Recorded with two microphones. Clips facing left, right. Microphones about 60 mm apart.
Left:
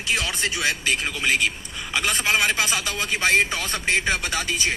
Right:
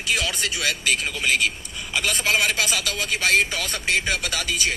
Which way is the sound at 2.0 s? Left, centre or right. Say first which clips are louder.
Even; left.